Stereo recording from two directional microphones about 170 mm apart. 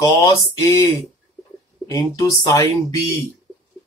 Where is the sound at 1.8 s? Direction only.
20° left (ahead or behind).